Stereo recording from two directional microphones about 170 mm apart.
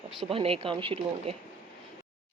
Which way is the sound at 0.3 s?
35° right (ahead or behind).